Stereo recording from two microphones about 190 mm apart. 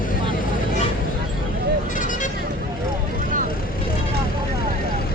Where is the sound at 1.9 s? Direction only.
45° left (ahead or behind).